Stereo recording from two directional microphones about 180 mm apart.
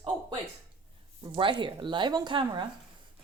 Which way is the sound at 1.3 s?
25° right (ahead or behind).